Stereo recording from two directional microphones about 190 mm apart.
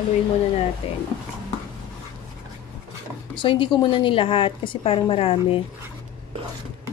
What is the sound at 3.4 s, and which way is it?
A woman's voice, 25° left (ahead or behind).